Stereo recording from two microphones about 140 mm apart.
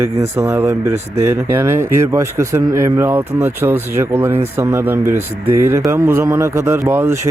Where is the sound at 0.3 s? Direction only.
15° right (ahead or behind).